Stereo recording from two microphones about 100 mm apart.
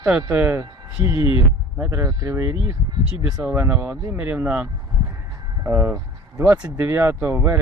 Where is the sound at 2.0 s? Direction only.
30° right (ahead or behind); by 4.6 s 15° right (ahead or behind).